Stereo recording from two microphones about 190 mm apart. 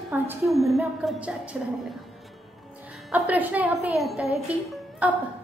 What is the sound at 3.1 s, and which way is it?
A woman's voice, 10° right (ahead or behind).